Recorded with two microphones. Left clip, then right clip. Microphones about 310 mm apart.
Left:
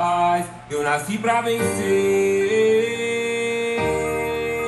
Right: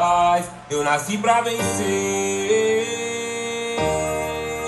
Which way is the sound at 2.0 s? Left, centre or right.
Right.